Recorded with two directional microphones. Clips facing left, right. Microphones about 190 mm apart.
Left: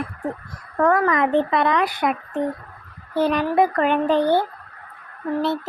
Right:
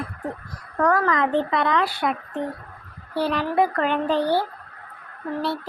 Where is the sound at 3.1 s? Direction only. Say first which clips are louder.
Left 3 dB; 20° left (ahead or behind).